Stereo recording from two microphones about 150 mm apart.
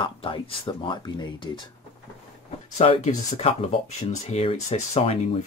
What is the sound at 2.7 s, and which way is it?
Speech, 45° left (ahead or behind).